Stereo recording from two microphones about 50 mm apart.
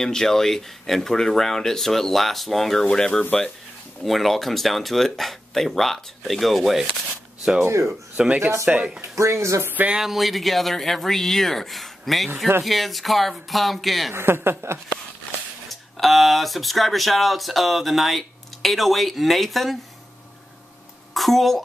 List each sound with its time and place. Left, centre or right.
0.0 s speech: centre
4.0 s speech: centre
8.2 s speech: centre
9.1 s speech: right
9.9 s speech: centre
14.1 s speech: right
15.7 s speech: centre
21.1 s a woman's voice: centre